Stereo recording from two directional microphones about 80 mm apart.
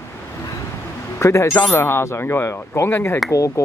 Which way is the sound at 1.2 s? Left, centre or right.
Left.